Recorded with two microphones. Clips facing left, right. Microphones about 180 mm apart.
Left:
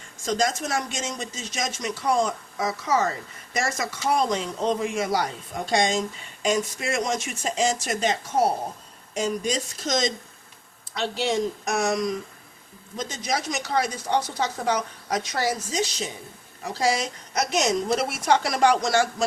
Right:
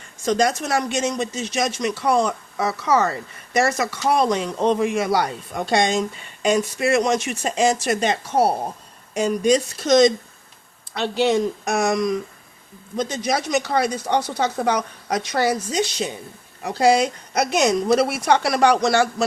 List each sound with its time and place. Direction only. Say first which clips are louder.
0.3 s a woman's voice: right 5 dB; 65° right (ahead or behind)